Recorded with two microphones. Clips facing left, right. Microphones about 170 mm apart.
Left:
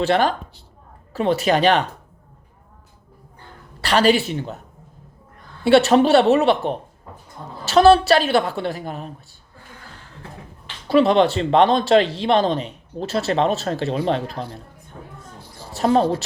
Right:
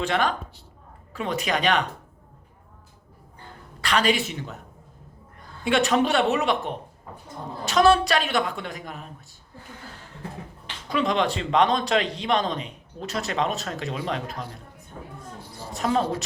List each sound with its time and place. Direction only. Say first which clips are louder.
0.0 s speech: left 6 dB; 30° left (ahead or behind)
3.8 s speech: left 6 dB; 35° left (ahead or behind)
5.6 s speech: left 8 dB; 35° left (ahead or behind)
10.8 s speech: left 9 dB; 30° left (ahead or behind)
15.7 s speech: left 7 dB; 35° left (ahead or behind)